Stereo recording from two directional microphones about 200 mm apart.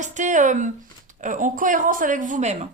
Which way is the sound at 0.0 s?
40° right (ahead or behind).